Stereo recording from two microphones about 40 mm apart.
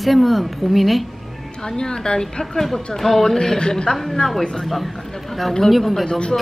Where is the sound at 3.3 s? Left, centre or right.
Centre.